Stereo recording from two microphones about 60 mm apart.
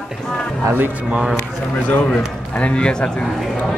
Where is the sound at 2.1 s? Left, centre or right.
Centre.